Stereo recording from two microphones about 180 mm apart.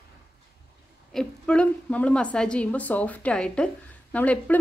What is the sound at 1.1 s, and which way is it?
A woman's voice, 5° left (ahead or behind).